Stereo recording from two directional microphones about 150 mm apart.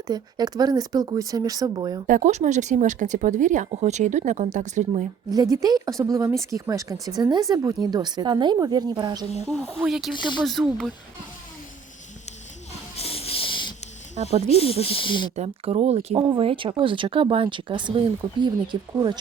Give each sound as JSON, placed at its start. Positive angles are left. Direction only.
{"t": 0.1, "sound": "speech", "side_deg": -25}
{"t": 2.0, "sound": "speech", "side_deg": -55}
{"t": 5.3, "sound": "speech", "side_deg": -25}
{"t": 9.5, "sound": "speech", "side_deg": 0}
{"t": 13.0, "sound": "a sound", "side_deg": 40}
{"t": 14.6, "sound": "speech", "side_deg": 40}
{"t": 15.4, "sound": "speech", "side_deg": -40}